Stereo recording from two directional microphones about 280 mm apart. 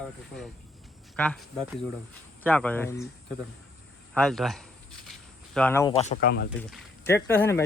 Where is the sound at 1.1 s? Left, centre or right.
Centre.